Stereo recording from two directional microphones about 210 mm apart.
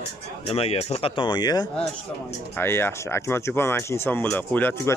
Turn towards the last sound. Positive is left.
turn(degrees=10)  # may be behind; listen again after turning